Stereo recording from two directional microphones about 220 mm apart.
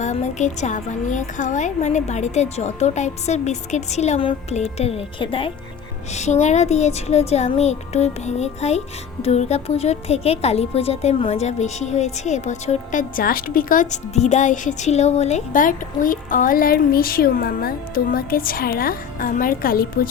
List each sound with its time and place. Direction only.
0.0 s a woman's voice: 30° left (ahead or behind)